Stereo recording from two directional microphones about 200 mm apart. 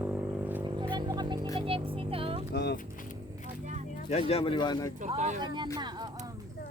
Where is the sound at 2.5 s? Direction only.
55° left (ahead or behind).